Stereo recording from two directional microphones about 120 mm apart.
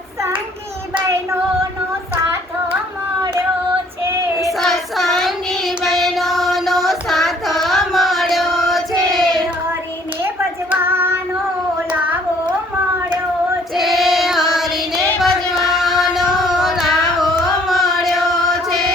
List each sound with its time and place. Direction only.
4.4 s child singing: centre (ahead or behind)
10.2 s child singing: 20° right (ahead or behind)
11.9 s carnatic music: 10° right (ahead or behind)
13.7 s child singing: centre (ahead or behind)
17.7 s a sound: centre (ahead or behind)